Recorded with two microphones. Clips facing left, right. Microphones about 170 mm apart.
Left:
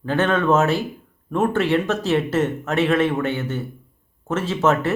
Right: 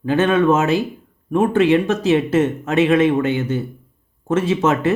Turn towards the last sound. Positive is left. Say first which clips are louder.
# right 2 dB
turn(degrees=-15)  # may be behind; listen again after turning